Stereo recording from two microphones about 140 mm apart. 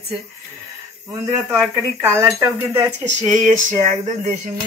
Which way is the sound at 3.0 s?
60° right (ahead or behind).